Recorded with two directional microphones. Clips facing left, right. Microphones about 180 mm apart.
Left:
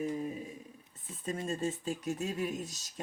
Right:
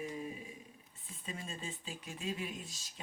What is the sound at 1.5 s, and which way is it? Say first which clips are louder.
Speech: left 11 dB; 45° left (ahead or behind).